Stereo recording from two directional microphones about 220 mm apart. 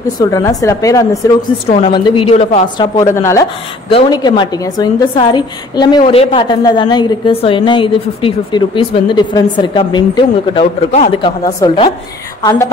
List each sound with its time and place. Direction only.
0.2 s a woman's voice: 15° left (ahead or behind)
3.2 s a woman's voice: 15° left (ahead or behind)